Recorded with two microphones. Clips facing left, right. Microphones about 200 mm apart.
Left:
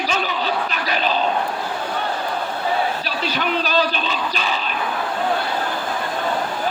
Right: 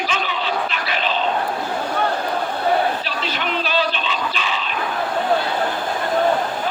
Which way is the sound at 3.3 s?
40° left (ahead or behind).